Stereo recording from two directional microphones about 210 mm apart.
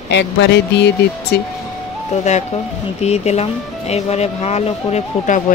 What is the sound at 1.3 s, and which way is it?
Speech, 50° left (ahead or behind).